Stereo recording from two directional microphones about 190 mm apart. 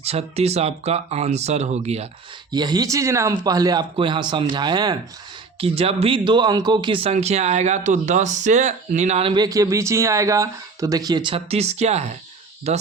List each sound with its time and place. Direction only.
0.0 s speech: 35° right (ahead or behind)
2.5 s speech: 20° right (ahead or behind)